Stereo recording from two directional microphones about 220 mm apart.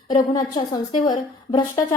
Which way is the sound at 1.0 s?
20° left (ahead or behind).